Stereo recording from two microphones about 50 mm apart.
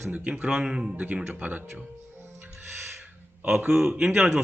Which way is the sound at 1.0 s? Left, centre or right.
Right.